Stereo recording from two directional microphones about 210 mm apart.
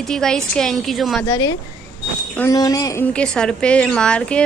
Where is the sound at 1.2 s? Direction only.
15° left (ahead or behind).